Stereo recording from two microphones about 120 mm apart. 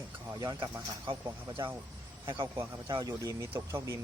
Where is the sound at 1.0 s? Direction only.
45° right (ahead or behind).